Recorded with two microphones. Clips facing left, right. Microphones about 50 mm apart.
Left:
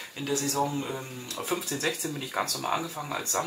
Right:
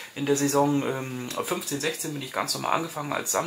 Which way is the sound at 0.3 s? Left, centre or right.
Right.